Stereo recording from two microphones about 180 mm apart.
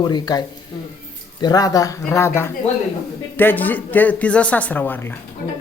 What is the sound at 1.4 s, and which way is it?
Speech, 20° left (ahead or behind).